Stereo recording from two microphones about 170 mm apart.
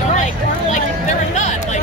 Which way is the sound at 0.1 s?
45° left (ahead or behind).